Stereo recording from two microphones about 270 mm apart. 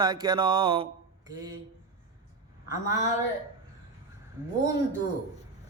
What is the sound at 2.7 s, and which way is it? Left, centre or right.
Speech, centre.